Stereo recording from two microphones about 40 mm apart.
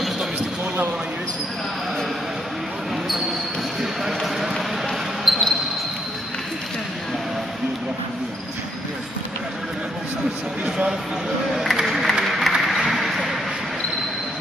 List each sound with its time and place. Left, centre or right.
4.0 s basketball bounce: centre
11.5 s music: centre
12.3 s a sound: centre